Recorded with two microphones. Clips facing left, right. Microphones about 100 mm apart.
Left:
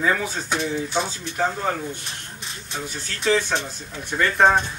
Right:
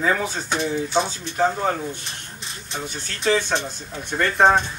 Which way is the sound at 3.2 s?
35° right (ahead or behind).